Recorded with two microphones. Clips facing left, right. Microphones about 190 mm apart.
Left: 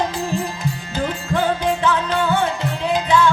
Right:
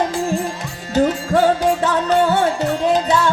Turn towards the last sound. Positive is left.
turn(degrees=-45)  # may be behind; listen again after turning